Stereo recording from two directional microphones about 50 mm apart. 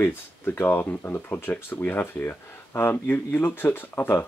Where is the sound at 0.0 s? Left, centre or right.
Left.